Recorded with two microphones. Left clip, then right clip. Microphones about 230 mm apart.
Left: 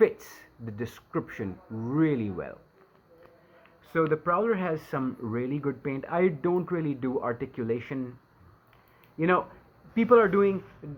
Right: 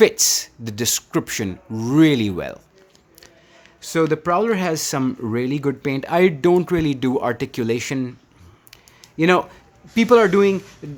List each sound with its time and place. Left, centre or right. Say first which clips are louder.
0.0 s speech: right 10 dB; right
3.9 s speech: right 7 dB; right
9.1 s speech: right 8 dB; right